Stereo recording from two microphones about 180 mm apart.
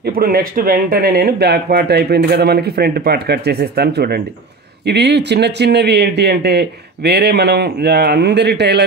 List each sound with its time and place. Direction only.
0.0 s speech: 55° right (ahead or behind)